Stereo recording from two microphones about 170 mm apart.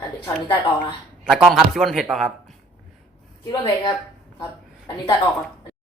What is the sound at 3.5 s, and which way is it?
A woman's voice, 25° left (ahead or behind).